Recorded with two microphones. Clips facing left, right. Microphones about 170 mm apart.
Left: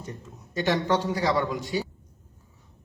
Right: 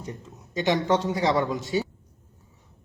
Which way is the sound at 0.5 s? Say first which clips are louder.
Right 1 dB; 20° right (ahead or behind).